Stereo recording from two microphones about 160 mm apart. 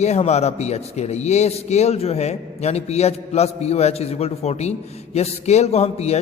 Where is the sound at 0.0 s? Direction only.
45° left (ahead or behind).